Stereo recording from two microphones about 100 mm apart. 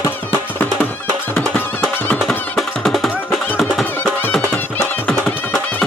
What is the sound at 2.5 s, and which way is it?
Music, centre (ahead or behind).